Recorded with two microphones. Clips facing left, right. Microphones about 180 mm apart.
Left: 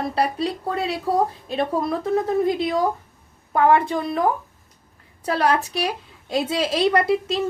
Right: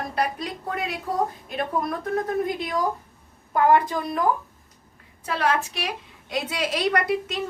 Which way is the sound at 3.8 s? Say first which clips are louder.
Left 2 dB; 30° left (ahead or behind).